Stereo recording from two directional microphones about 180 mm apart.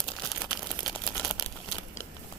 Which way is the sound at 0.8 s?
Centre (ahead or behind).